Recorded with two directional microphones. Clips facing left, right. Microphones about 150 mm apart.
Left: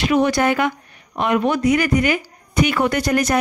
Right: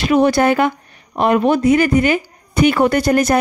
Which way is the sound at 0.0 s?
35° right (ahead or behind).